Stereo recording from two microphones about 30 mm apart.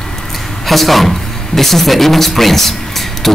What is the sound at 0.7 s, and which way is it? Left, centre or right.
Speech, centre.